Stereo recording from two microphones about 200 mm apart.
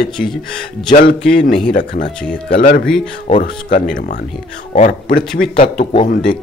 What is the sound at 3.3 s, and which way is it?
A man's voice, 40° left (ahead or behind).